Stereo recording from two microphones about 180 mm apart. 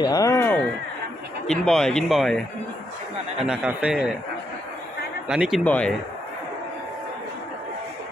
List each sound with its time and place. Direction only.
0.0 s speech: 20° left (ahead or behind)
1.5 s speech: centre (ahead or behind)
5.3 s speech: 5° right (ahead or behind)
5.6 s a man's voice: 5° left (ahead or behind)